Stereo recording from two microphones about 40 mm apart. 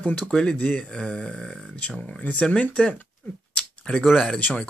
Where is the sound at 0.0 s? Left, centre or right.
Left.